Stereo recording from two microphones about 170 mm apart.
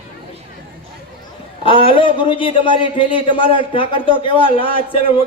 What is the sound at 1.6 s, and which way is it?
A man's voice, 30° left (ahead or behind).